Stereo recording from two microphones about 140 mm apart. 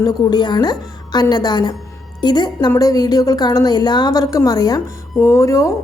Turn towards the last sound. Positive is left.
turn(degrees=20)  # may be behind; listen again after turning